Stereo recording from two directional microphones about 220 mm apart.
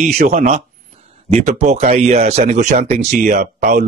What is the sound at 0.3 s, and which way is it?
Speech, 30° right (ahead or behind).